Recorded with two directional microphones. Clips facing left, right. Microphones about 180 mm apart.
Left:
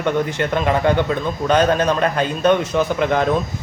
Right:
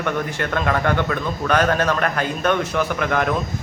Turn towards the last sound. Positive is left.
turn(degrees=25)  # may be behind; listen again after turning